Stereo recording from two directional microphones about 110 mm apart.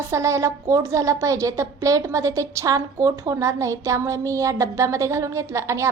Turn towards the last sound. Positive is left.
turn(degrees=-25)  # may be behind; listen again after turning